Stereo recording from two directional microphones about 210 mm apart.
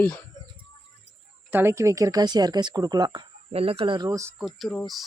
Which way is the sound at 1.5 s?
10° right (ahead or behind).